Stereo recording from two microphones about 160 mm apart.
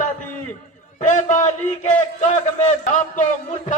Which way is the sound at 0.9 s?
50° left (ahead or behind).